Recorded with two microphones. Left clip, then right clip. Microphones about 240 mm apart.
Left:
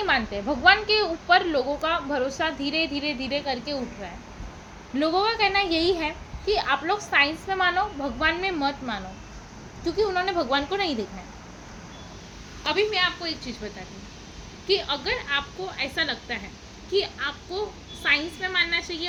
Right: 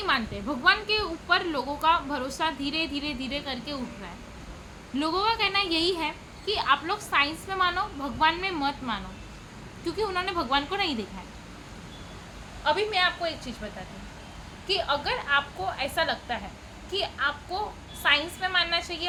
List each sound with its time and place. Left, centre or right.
0.0 s a woman's voice: centre
4.9 s a woman's voice: centre
12.6 s a woman's voice: centre
15.3 s a woman's voice: centre